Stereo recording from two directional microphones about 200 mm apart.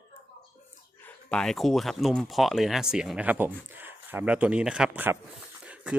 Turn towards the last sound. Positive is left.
turn(degrees=-5)  # may be behind; listen again after turning